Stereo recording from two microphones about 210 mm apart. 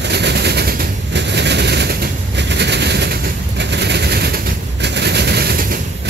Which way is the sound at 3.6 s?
55° right (ahead or behind).